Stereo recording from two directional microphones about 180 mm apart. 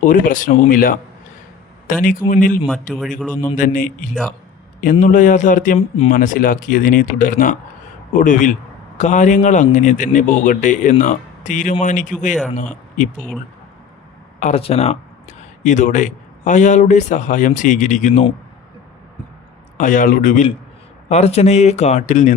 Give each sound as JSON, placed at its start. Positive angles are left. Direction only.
{"t": 0.0, "sound": "speech", "side_deg": 50}
{"t": 3.2, "sound": "a man's voice", "side_deg": 10}
{"t": 3.5, "sound": "speech", "side_deg": 50}
{"t": 13.1, "sound": "a man's voice", "side_deg": 5}
{"t": 14.3, "sound": "speech", "side_deg": 40}
{"t": 19.7, "sound": "a man's voice", "side_deg": 45}